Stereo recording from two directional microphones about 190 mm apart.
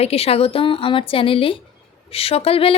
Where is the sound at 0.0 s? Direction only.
30° left (ahead or behind).